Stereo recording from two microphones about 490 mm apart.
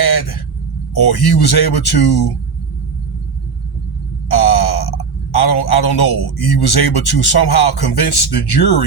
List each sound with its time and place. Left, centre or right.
0.0 s a sound: left
0.9 s speech: left
4.3 s speech: left